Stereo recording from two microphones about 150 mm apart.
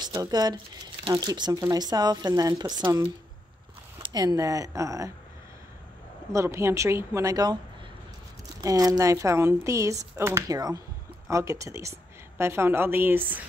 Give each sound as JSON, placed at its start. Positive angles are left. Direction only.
{"t": 0.0, "sound": "speech", "side_deg": -25}
{"t": 4.0, "sound": "speech", "side_deg": -25}
{"t": 6.3, "sound": "speech", "side_deg": -20}
{"t": 8.5, "sound": "a woman's voice", "side_deg": -25}